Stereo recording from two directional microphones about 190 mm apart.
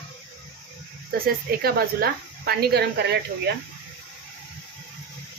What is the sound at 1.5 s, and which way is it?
Speech, 50° right (ahead or behind).